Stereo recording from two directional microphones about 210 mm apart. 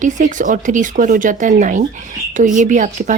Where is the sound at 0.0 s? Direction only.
35° right (ahead or behind).